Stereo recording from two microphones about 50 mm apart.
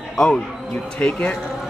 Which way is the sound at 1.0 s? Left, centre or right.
Left.